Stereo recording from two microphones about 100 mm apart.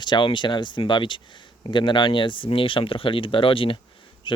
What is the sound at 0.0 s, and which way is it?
Speech, 50° left (ahead or behind).